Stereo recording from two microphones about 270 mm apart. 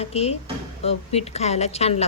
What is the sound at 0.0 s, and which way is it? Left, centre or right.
Speech, left.